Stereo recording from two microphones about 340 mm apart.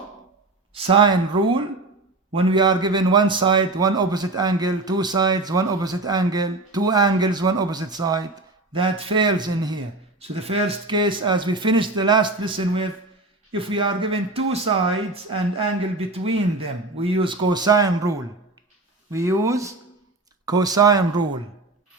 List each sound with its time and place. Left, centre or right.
0.7 s a man's voice: centre